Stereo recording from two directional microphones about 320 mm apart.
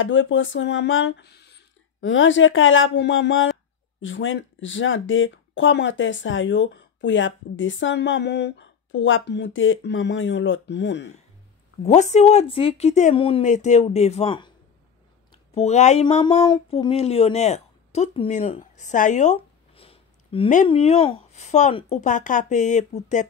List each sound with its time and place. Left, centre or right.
0.0 s speech: left
11.8 s speech: left
15.5 s speech: left